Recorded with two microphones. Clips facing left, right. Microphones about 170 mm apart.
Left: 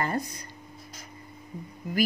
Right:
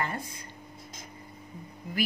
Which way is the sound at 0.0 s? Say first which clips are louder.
Left 4 dB; 40° left (ahead or behind).